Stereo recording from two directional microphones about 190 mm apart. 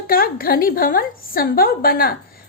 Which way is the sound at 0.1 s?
50° left (ahead or behind).